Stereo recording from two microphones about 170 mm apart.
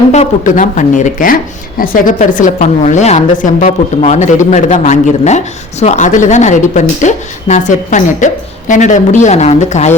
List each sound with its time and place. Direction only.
0.1 s a woman's voice: 45° left (ahead or behind)